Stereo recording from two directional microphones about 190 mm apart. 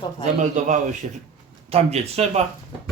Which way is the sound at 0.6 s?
40° right (ahead or behind).